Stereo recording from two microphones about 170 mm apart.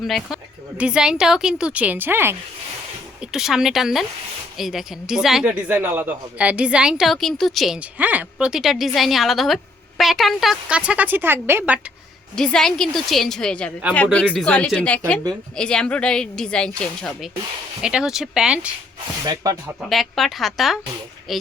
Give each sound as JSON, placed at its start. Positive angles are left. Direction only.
{"t": 0.8, "sound": "a woman's voice", "side_deg": -5}
{"t": 12.4, "sound": "a woman's voice", "side_deg": 5}
{"t": 19.2, "sound": "speech", "side_deg": -20}
{"t": 19.9, "sound": "a woman's voice", "side_deg": 0}